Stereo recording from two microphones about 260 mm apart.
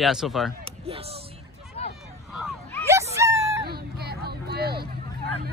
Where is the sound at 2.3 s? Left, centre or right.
Centre.